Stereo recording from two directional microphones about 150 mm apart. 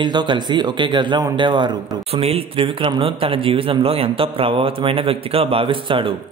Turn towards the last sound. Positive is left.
turn(degrees=-35)  # may be behind; listen again after turning